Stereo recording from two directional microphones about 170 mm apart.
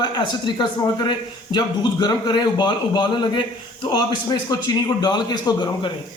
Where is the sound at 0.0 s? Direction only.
25° left (ahead or behind).